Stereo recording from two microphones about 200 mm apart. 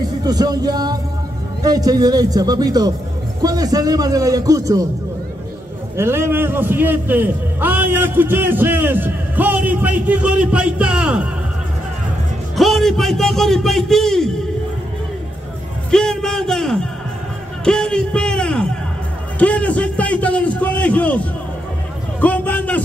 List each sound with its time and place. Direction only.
0.2 s a man's voice: 20° right (ahead or behind)
5.9 s a man's voice: 10° right (ahead or behind)
12.5 s a man's voice: centre (ahead or behind)
15.9 s speech: 5° left (ahead or behind)
17.6 s music: 5° left (ahead or behind)
19.3 s a sound: 5° left (ahead or behind)
22.2 s a man's voice: 10° left (ahead or behind)